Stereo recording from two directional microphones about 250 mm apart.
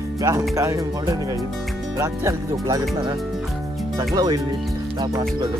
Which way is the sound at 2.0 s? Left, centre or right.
Centre.